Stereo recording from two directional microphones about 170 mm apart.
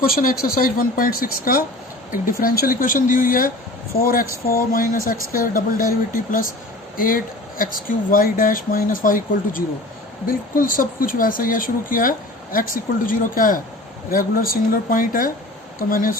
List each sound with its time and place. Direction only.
0.0 s speech: 55° left (ahead or behind)